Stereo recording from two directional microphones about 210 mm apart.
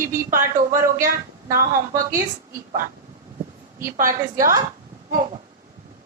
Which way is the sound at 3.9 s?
40° right (ahead or behind).